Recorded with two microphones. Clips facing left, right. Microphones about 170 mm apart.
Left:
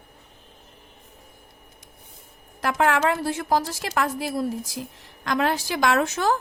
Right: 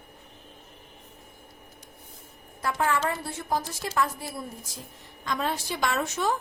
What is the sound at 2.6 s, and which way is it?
A woman's voice, 85° left.